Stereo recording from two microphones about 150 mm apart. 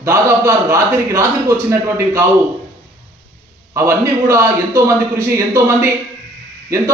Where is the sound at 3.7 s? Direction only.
20° right (ahead or behind).